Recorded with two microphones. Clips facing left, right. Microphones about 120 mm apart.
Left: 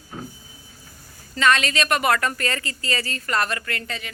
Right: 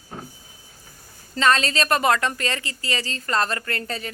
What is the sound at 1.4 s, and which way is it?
Speech, 30° right (ahead or behind).